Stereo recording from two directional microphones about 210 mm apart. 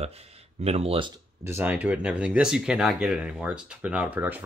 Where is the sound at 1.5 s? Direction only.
10° right (ahead or behind).